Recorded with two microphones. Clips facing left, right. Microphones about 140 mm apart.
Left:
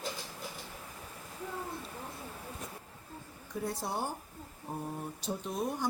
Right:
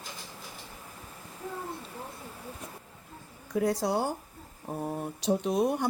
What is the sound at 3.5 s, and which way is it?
Speech, 90° right.